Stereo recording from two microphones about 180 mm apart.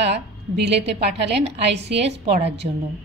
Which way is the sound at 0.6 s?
70° right (ahead or behind).